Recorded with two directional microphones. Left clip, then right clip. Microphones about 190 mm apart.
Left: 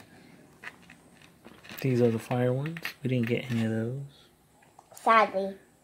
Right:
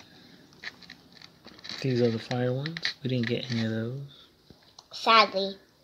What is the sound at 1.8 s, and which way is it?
Speech, 5° left (ahead or behind).